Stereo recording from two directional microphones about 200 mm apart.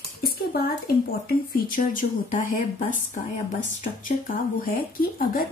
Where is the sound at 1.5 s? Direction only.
45° left (ahead or behind).